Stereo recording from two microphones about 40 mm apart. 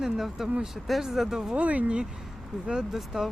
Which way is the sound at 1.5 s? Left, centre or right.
Right.